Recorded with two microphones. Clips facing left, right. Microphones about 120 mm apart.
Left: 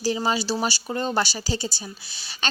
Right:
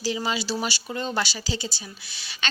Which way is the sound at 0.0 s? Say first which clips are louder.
Left 3 dB; 40° left (ahead or behind).